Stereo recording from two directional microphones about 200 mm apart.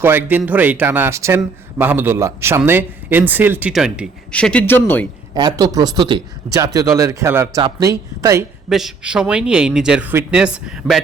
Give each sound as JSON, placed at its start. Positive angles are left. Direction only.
{"t": 0.0, "sound": "a man's voice", "side_deg": -10}
{"t": 5.3, "sound": "a man's voice", "side_deg": -20}
{"t": 8.7, "sound": "speech", "side_deg": -5}